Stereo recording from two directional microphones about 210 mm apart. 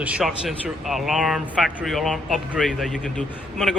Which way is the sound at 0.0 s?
5° right (ahead or behind).